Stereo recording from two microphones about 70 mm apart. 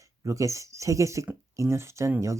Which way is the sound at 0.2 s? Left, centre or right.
Right.